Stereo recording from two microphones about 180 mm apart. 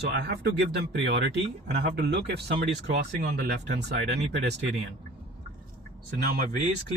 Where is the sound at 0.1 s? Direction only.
60° right (ahead or behind).